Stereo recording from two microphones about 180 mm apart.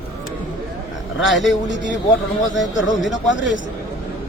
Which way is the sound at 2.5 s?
90° left.